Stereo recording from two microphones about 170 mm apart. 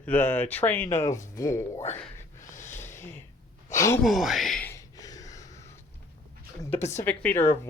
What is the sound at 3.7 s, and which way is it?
Speech, 15° left (ahead or behind).